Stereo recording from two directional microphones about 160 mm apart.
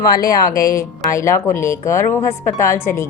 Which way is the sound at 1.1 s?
20° left (ahead or behind).